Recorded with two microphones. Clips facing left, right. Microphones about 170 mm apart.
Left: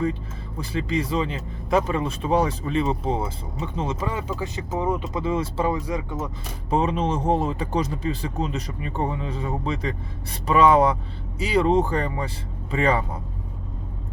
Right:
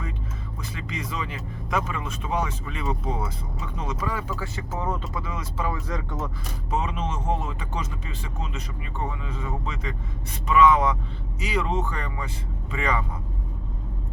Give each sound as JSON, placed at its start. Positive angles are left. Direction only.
{"t": 0.6, "sound": "speech", "side_deg": 30}
{"t": 5.7, "sound": "speech", "side_deg": 15}
{"t": 6.7, "sound": "speech", "side_deg": 35}